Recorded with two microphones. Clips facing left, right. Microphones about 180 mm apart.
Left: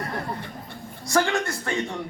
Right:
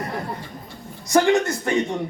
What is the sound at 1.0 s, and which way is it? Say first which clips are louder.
A man's voice: right 6 dB; 20° right (ahead or behind).